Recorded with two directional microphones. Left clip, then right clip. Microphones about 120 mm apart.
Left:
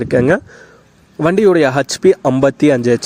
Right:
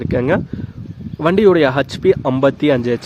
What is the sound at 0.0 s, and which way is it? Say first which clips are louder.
Speech: left 4 dB; 40° left (ahead or behind).